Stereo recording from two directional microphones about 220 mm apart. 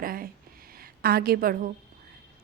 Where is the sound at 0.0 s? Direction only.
40° right (ahead or behind).